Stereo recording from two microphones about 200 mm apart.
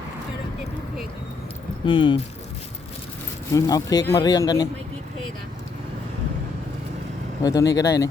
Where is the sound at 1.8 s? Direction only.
25° left (ahead or behind).